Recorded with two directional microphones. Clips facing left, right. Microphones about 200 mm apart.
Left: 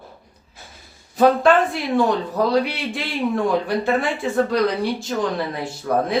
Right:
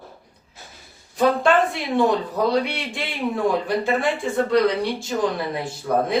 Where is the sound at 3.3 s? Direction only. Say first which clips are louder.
Even; centre (ahead or behind).